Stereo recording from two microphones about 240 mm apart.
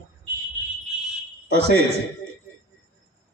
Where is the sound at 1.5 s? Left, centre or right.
Right.